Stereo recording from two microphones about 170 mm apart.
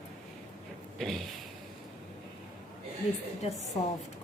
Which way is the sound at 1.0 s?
Centre (ahead or behind).